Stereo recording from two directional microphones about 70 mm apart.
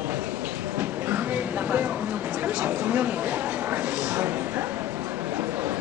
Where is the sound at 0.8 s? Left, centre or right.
Right.